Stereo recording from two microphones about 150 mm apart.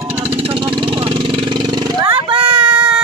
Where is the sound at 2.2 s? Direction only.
35° right (ahead or behind).